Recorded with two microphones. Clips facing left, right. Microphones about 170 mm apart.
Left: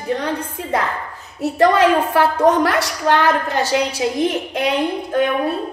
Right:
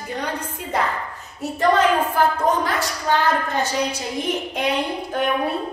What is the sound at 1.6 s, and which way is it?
A woman's voice, 80° left.